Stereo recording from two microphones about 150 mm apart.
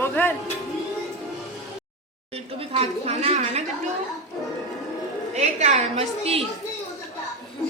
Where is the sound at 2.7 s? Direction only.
40° right (ahead or behind).